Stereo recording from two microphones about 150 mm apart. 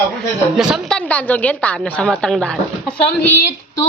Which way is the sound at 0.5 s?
5° right (ahead or behind).